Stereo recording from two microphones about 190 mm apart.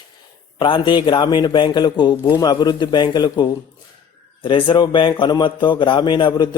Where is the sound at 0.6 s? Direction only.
25° left (ahead or behind).